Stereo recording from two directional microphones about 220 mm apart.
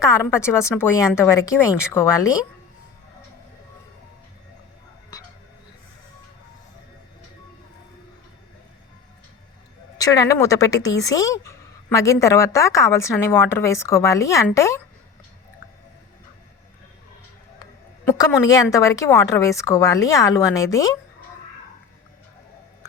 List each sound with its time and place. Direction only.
0.0 s a woman's voice: 15° left (ahead or behind)
10.0 s a woman's voice: 15° left (ahead or behind)
18.2 s a woman's voice: 15° left (ahead or behind)